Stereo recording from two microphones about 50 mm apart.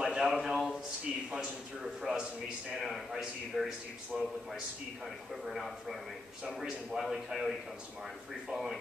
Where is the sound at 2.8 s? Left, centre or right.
Centre.